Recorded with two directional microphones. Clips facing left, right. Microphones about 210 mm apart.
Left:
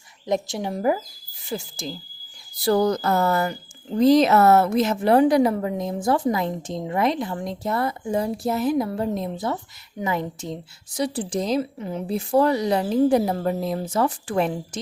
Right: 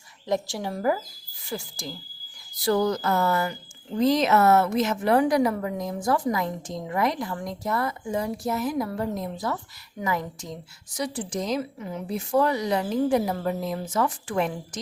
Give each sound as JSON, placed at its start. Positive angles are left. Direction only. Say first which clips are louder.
{"t": 0.3, "sound": "a woman's voice", "louder": "left 2 dB", "side_deg": 20}
{"t": 2.6, "sound": "a woman's voice", "louder": "left 3 dB", "side_deg": 35}